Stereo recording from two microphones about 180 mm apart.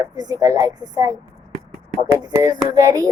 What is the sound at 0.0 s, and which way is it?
A woman's voice, 20° right (ahead or behind).